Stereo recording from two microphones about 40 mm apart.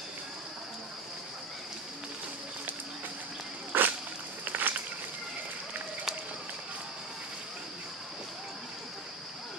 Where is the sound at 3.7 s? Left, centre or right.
Right.